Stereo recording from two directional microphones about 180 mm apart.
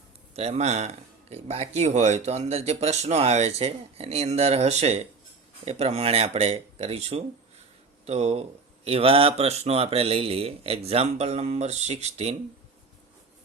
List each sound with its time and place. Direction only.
0.3 s speech: 35° right (ahead or behind)